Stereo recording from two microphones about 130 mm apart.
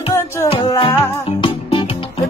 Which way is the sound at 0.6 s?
30° left (ahead or behind).